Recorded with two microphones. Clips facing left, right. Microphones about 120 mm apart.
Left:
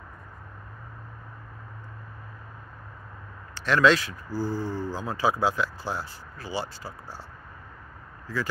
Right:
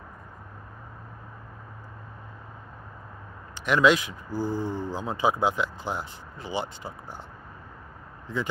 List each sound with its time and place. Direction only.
3.5 s speech: 15° right (ahead or behind)
8.3 s speech: 20° right (ahead or behind)